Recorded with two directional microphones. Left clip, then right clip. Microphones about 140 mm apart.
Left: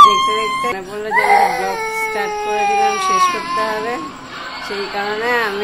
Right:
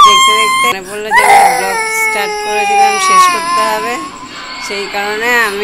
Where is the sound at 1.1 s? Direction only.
70° right (ahead or behind).